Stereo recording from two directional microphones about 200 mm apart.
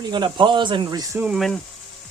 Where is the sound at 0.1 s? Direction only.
20° right (ahead or behind).